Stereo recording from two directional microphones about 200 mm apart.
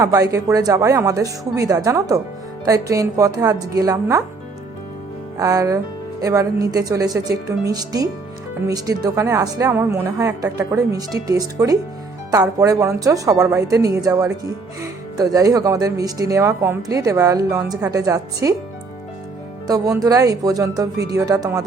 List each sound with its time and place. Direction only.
0.0 s a woman's voice: 15° right (ahead or behind)
5.4 s a woman's voice: 15° right (ahead or behind)
19.6 s a woman's voice: 15° right (ahead or behind)